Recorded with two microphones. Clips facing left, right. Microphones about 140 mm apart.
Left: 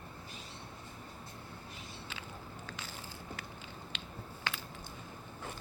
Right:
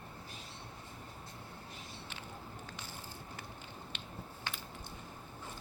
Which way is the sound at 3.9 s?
90° left.